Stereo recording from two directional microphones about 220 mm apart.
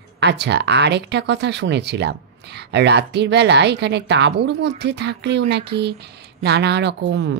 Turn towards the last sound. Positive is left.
turn(degrees=-55)  # may be behind; listen again after turning